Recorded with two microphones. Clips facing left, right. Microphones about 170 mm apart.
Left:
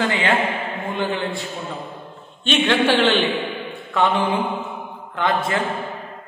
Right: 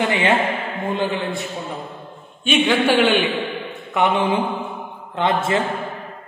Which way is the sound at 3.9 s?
20° right (ahead or behind).